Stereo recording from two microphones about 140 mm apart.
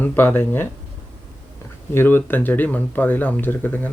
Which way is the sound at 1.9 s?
15° left (ahead or behind).